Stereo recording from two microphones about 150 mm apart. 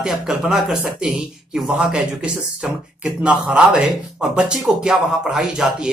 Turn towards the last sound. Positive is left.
turn(degrees=-5)  # may be behind; listen again after turning